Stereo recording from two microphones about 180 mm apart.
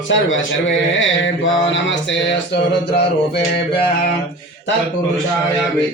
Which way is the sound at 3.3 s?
30° left (ahead or behind).